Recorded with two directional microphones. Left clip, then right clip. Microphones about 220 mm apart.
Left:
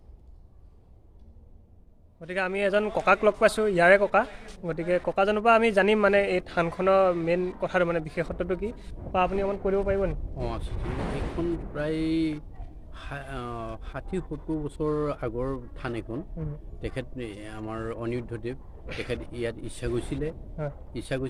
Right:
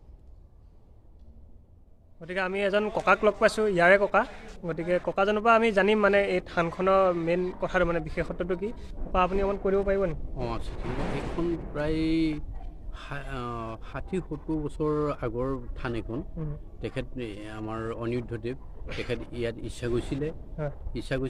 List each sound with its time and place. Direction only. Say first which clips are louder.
2.2 s a man's voice: left 1 dB; 5° left (ahead or behind)
10.3 s speech: even; 15° right (ahead or behind)